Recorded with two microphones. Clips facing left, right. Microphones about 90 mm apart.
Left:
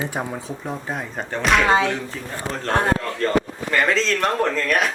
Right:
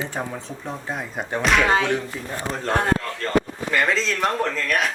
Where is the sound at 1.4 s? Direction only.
Centre (ahead or behind).